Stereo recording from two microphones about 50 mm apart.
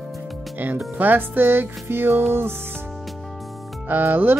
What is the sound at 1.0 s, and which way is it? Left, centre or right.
Speech, right.